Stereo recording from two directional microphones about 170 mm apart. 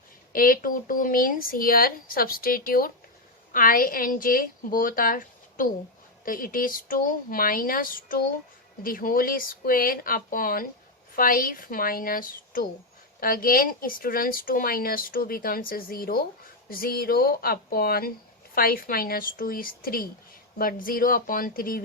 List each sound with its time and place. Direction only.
0.3 s speech: 55° left (ahead or behind)